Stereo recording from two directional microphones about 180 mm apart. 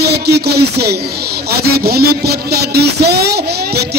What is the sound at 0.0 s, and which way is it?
Speech, 65° right (ahead or behind).